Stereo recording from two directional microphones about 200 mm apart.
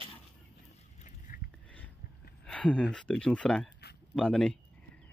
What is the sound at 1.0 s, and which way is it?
Vehicle, 40° left (ahead or behind).